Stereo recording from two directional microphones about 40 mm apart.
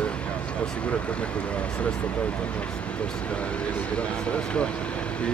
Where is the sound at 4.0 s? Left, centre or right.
Left.